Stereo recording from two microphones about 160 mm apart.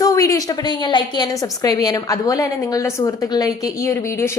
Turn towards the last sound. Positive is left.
turn(degrees=20)  # may be behind; listen again after turning